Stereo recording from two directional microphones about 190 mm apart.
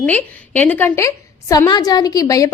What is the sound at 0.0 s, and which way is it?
A woman's voice, 10° left (ahead or behind).